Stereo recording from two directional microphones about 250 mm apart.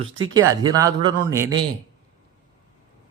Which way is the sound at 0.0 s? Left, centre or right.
Right.